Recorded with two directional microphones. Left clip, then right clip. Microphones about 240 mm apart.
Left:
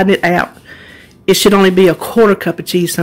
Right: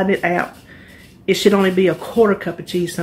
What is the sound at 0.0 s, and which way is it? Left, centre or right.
Speech, left.